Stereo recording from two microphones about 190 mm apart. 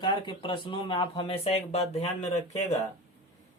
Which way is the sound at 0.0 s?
25° left (ahead or behind).